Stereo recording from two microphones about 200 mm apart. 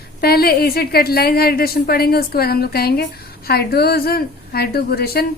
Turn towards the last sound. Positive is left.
turn(degrees=50)  # may be behind; listen again after turning